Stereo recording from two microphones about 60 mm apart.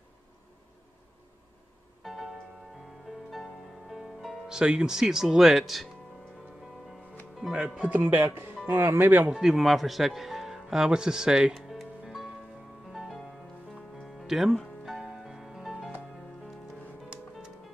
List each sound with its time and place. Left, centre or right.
2.0 s music: centre
4.5 s speech: centre
7.5 s speech: centre
8.0 s speech: right
9.4 s speech: centre
12.8 s music: centre